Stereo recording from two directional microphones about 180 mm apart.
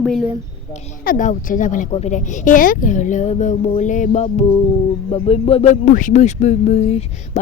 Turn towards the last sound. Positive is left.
turn(degrees=35)  # may be behind; listen again after turning